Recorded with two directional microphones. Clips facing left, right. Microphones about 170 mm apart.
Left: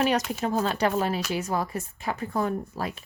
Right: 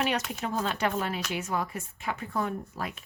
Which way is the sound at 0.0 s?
40° left (ahead or behind).